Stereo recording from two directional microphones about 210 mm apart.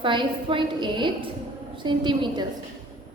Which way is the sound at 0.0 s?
25° right (ahead or behind).